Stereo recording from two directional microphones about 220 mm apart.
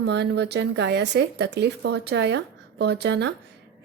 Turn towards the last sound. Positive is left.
turn(degrees=-50)  # may be behind; listen again after turning